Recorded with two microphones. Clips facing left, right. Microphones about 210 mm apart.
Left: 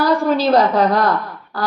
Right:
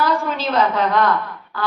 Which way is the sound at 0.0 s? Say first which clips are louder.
Left 5 dB; 35° left (ahead or behind).